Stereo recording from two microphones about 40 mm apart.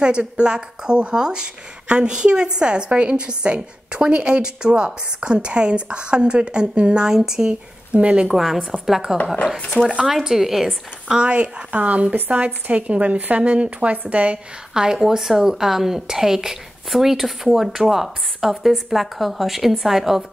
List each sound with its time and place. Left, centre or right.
0.0 s a woman's voice: right
7.9 s a woman's voice: right
8.3 s a woman's voice: centre
11.1 s speech: right
14.7 s a woman's voice: centre